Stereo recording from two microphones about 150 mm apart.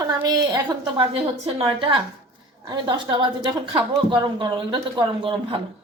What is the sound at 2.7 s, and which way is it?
A woman's voice, 30° right (ahead or behind).